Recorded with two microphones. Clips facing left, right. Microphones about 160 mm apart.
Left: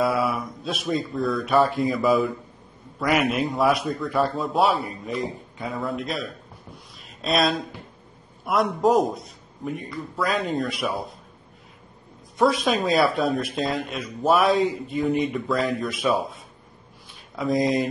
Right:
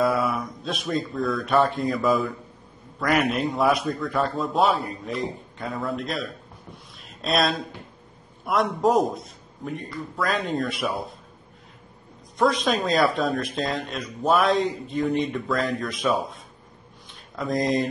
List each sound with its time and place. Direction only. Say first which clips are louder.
0.0 s a man's voice: even; centre (ahead or behind)
12.4 s a man's voice: left 1 dB; 5° left (ahead or behind)
17.4 s a man's voice: left 2 dB; centre (ahead or behind)